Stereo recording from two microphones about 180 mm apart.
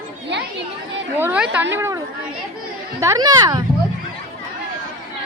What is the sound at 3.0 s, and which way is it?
Speech, 20° right (ahead or behind).